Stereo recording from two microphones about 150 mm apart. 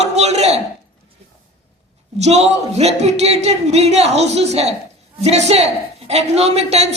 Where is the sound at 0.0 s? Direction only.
45° right (ahead or behind).